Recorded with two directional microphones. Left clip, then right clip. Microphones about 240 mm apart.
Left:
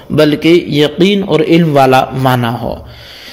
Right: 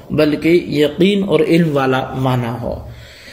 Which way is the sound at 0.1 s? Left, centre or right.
Left.